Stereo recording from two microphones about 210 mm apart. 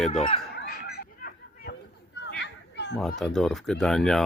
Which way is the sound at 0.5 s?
50° left (ahead or behind).